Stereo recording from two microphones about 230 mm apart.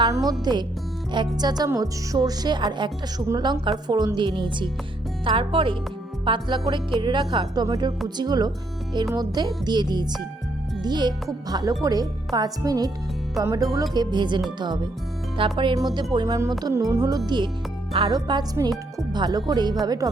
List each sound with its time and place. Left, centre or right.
0.3 s speech: centre
18.9 s music: centre
19.5 s speech: centre